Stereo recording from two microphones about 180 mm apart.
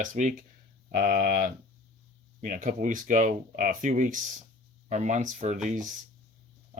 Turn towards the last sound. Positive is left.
turn(degrees=-45)  # may be behind; listen again after turning